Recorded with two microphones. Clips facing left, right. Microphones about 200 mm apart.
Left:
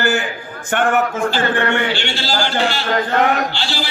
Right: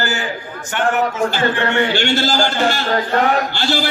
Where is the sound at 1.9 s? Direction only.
45° right (ahead or behind).